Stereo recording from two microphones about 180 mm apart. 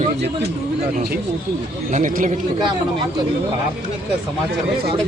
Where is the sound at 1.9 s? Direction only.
45° right (ahead or behind).